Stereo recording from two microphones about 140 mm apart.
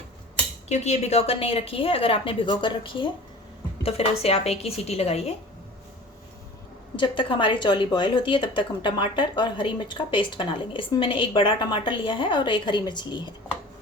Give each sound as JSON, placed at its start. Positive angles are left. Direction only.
{"t": 0.7, "sound": "a woman's voice", "side_deg": 50}
{"t": 6.9, "sound": "speech", "side_deg": 35}